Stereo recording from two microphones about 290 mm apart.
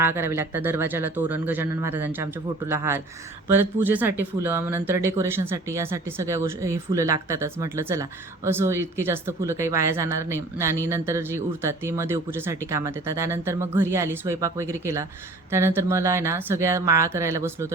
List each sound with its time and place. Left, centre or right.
0.0 s speech: centre